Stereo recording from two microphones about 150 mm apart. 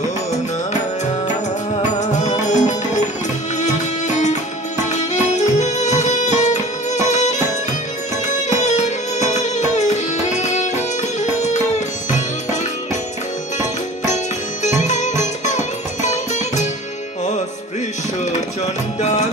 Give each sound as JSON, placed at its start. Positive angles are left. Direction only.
{"t": 1.8, "sound": "music", "side_deg": 50}
{"t": 13.6, "sound": "music", "side_deg": 50}
{"t": 18.9, "sound": "music", "side_deg": 50}